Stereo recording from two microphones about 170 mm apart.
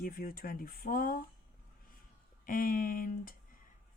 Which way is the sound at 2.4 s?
55° left (ahead or behind).